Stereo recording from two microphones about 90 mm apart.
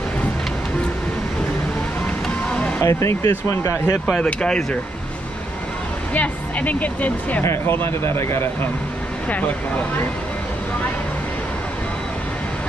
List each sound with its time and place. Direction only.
2.2 s music: 10° left (ahead or behind)
2.8 s speech: 30° left (ahead or behind)
4.0 s speech: 10° left (ahead or behind)
6.1 s speech: 15° left (ahead or behind)